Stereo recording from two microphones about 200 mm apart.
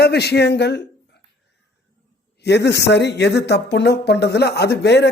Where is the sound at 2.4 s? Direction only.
55° left (ahead or behind).